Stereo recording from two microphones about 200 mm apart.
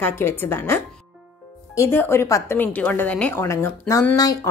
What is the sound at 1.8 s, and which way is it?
A woman's voice, 10° left (ahead or behind).